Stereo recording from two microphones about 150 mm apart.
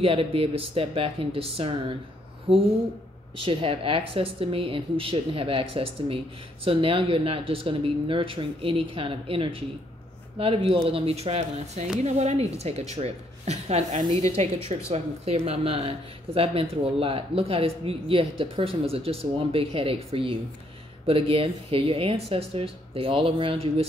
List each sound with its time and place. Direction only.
0.0 s a woman's voice: 40° right (ahead or behind)